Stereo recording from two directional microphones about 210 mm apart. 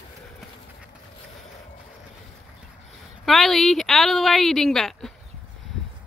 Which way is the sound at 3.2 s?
Centre (ahead or behind).